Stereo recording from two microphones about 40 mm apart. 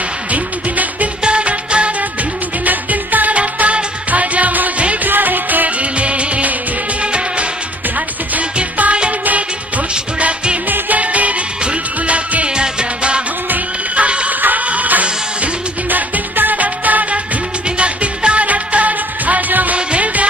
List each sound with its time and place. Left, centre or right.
1.2 s music: right
2.6 s music: right
5.0 s music: right
5.9 s music of bollywood: right
7.0 s music: right
10.1 s music: right
10.7 s music: right
12.4 s music: right
17.6 s music: right